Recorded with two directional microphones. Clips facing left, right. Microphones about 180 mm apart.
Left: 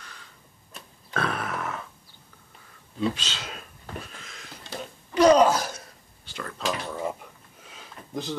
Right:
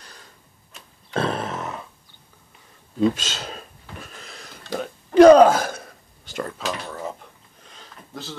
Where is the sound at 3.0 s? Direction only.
45° right (ahead or behind).